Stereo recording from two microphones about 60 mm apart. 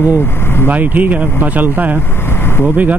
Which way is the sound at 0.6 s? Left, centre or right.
Right.